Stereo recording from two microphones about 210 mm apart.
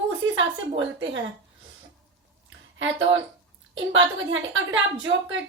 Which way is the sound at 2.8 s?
65° right (ahead or behind).